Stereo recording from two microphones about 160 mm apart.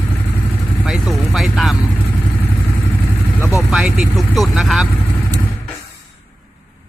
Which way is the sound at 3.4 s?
20° left (ahead or behind).